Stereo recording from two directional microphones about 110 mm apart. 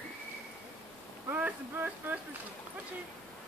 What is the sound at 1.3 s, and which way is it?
Speech, 15° right (ahead or behind).